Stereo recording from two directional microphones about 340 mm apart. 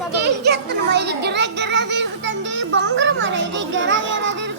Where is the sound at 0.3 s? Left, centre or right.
Right.